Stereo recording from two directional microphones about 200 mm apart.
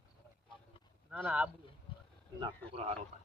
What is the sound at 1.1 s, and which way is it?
Speech, 10° right (ahead or behind).